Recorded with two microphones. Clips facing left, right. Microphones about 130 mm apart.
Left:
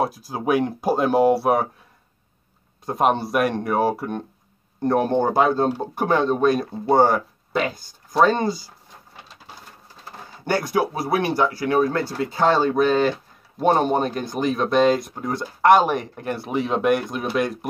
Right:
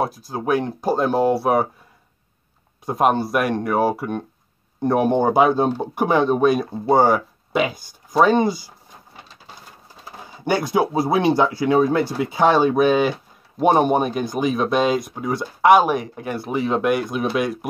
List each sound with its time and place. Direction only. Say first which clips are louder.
0.0 s speech: even; 5° left (ahead or behind)
2.8 s speech: right 2 dB; 5° right (ahead or behind)
10.4 s speech: right 2 dB; 20° right (ahead or behind)